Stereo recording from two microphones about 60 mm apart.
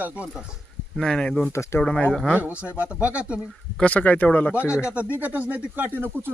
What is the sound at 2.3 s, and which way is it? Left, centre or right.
Speech, right.